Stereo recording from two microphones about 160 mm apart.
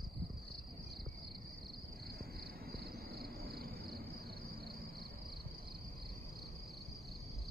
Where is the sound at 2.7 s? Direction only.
75° right (ahead or behind).